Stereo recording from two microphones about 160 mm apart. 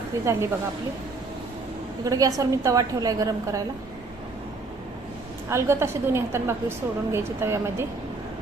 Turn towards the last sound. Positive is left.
turn(degrees=-15)  # may be behind; listen again after turning